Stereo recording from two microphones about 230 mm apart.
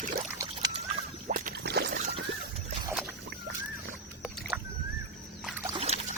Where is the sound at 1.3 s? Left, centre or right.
Right.